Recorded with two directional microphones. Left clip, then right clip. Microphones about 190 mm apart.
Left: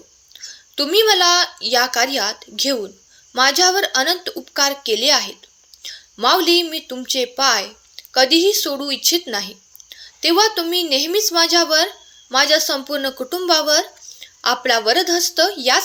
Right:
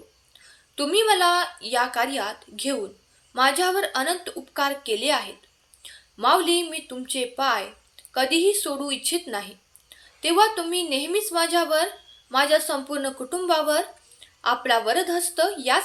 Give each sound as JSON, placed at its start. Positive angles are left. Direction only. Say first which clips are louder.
{"t": 0.3, "sound": "a woman's voice", "louder": "left 7 dB", "side_deg": 40}